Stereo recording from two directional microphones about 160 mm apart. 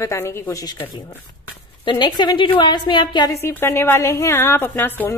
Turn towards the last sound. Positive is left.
turn(degrees=15)  # may be behind; listen again after turning